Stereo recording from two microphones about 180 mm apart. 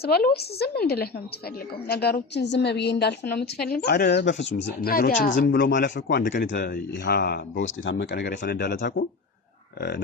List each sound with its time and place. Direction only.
0.0 s a woman's voice: 60° left (ahead or behind)
4.6 s speech: 55° left (ahead or behind)
6.9 s a woman's voice: 70° left (ahead or behind)